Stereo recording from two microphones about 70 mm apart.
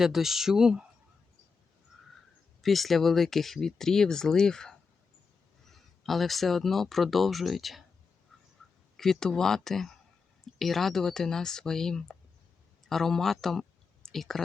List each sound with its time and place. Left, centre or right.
0.0 s speech: centre
2.6 s speech: centre
9.0 s speech: centre